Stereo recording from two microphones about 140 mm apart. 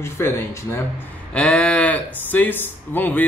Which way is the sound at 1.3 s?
10° left (ahead or behind).